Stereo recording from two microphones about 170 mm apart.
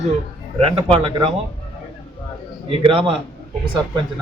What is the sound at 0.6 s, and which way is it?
Speech, 35° right (ahead or behind).